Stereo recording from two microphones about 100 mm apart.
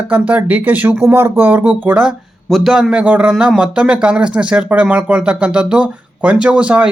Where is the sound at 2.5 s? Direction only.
Centre (ahead or behind).